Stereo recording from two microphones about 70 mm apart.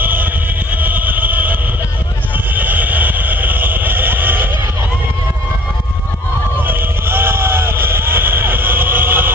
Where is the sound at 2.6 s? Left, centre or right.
Right.